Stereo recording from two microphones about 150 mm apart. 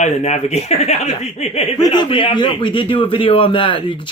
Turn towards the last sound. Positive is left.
turn(degrees=35)  # may be behind; listen again after turning